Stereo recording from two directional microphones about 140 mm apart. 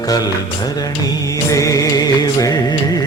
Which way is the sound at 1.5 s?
25° left (ahead or behind).